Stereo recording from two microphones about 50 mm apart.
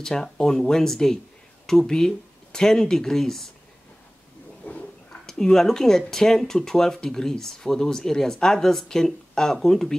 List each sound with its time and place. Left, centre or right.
0.0 s speech: centre
4.6 s a sound: left
5.2 s speech: centre